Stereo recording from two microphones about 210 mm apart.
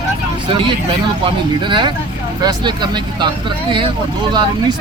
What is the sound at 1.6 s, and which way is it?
Speech, 20° right (ahead or behind).